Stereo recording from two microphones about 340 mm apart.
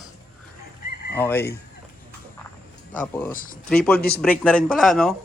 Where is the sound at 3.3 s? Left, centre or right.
Left.